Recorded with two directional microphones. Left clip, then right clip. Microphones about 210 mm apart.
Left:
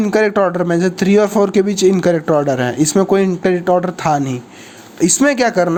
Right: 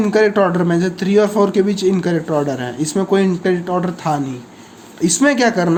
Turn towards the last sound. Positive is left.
turn(degrees=30)  # may be behind; listen again after turning